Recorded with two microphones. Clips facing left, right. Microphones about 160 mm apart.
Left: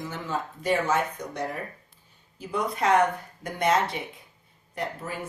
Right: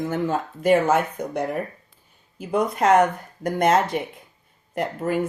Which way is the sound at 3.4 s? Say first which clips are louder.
Right 5 dB; 45° right (ahead or behind).